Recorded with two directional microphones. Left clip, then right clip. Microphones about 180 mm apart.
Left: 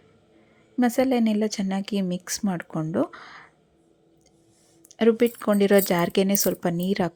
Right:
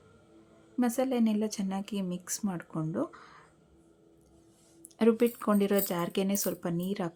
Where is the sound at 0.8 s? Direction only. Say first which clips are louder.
Left 7 dB; 25° left (ahead or behind).